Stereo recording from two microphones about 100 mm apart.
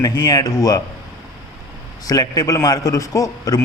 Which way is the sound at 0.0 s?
40° left (ahead or behind).